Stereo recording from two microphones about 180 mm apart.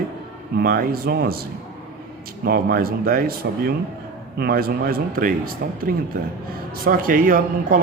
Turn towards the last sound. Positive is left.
turn(degrees=-50)  # may be behind; listen again after turning